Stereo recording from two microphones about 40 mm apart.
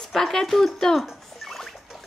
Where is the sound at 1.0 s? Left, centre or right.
Centre.